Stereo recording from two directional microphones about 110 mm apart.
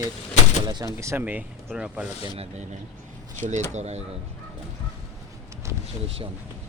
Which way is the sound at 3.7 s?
80° right.